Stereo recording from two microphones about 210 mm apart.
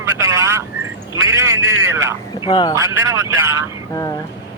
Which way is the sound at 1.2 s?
15° right (ahead or behind).